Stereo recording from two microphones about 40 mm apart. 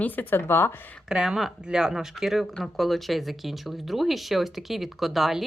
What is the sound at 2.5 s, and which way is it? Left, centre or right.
Speech, centre.